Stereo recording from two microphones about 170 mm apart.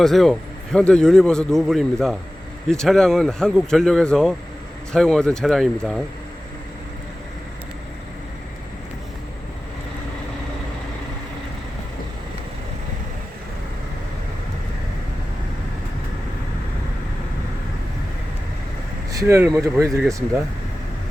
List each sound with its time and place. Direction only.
0.0 s a man's voice: centre (ahead or behind)
19.2 s speech: 15° right (ahead or behind)